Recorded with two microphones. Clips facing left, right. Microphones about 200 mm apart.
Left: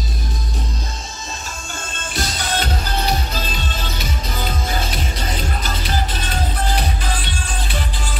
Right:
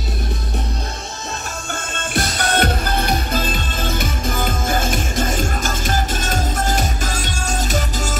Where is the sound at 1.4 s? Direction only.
55° right (ahead or behind).